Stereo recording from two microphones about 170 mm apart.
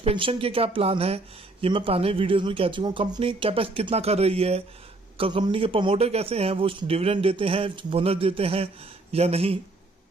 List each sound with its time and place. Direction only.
0.0 s speech: 30° right (ahead or behind)